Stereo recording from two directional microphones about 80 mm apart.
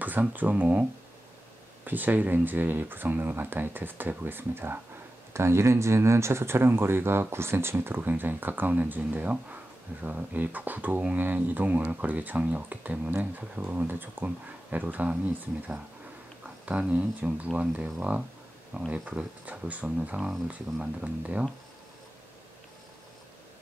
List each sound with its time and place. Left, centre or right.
0.0 s speech: right
1.9 s speech: right
16.7 s speech: centre
20.2 s speech: centre
20.4 s speech: centre